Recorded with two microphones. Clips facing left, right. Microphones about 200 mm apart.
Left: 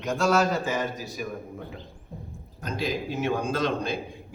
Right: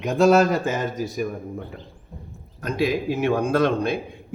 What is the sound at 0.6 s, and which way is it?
Speech, 50° right (ahead or behind).